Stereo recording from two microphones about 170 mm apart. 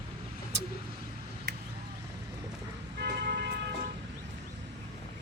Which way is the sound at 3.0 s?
70° right (ahead or behind).